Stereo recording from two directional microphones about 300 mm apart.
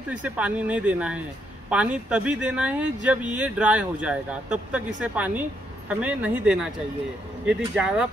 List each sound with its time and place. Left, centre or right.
0.1 s speech: centre